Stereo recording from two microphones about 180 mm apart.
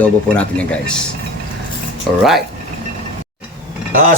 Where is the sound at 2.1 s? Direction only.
Centre (ahead or behind).